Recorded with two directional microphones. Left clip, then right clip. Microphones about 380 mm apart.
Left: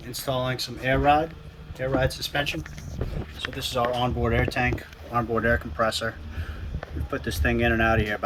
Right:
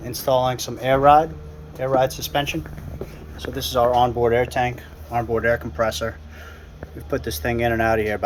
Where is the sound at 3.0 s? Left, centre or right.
Right.